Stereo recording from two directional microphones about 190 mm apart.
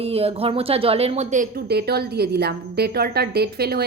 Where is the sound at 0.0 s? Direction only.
30° right (ahead or behind).